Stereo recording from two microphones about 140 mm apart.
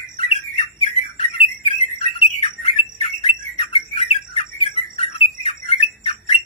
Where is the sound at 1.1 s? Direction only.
45° left (ahead or behind).